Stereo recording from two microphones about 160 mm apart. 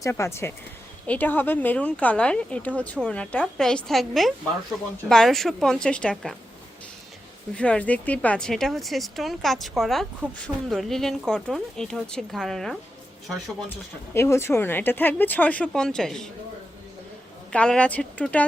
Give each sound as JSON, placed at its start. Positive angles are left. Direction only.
{"t": 0.0, "sound": "speech", "side_deg": 15}
{"t": 7.5, "sound": "speech", "side_deg": 5}
{"t": 14.1, "sound": "speech", "side_deg": 15}
{"t": 17.5, "sound": "speech", "side_deg": 5}